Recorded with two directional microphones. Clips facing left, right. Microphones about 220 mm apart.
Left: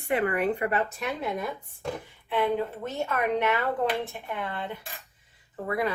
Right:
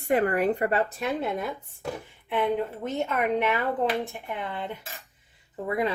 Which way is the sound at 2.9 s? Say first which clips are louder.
Right 2 dB; 20° right (ahead or behind).